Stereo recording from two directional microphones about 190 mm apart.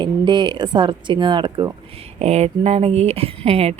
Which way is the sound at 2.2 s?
35° right (ahead or behind).